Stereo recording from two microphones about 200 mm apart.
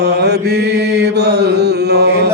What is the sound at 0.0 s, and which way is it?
Mantra, 55° right (ahead or behind).